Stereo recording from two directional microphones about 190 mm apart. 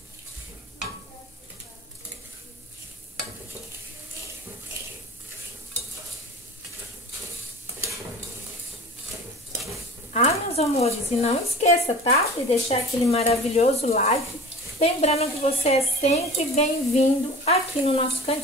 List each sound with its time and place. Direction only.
10.1 s speech: 35° left (ahead or behind)